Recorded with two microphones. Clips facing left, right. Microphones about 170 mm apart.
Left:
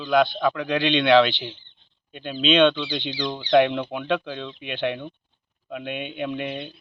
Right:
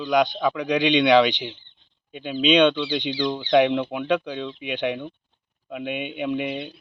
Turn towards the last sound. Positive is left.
turn(degrees=-10)  # may be behind; listen again after turning